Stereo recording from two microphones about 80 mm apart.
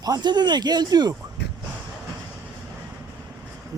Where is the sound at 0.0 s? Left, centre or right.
Right.